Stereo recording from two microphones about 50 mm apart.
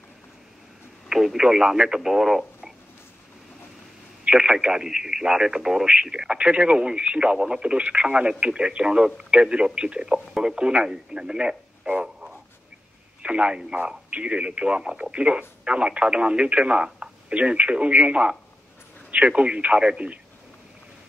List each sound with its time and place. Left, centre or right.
1.0 s speech: centre
4.2 s speech: centre